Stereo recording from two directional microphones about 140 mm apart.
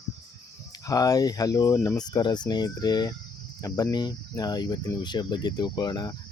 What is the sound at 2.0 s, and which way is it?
Cricket, 30° left (ahead or behind).